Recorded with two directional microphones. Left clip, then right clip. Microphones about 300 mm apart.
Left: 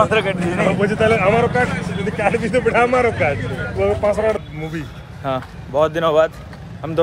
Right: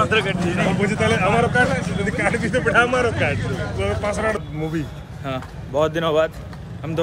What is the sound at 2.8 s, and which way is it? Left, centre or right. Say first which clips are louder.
Speech: left 2 dB; left.